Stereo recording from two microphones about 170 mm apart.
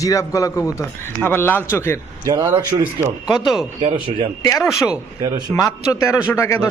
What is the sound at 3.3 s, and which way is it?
Speech, centre (ahead or behind).